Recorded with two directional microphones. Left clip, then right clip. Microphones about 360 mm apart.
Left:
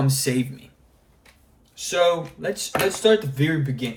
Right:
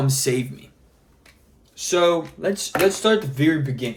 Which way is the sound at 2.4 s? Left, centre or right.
Centre.